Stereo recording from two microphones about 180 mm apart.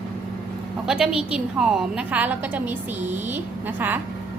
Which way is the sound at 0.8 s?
5° right (ahead or behind).